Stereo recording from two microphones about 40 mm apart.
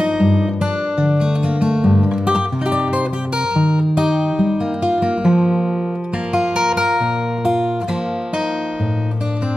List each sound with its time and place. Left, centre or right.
0.0 s music: right